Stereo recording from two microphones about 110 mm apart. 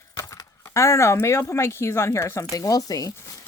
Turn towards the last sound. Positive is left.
turn(degrees=35)  # may be behind; listen again after turning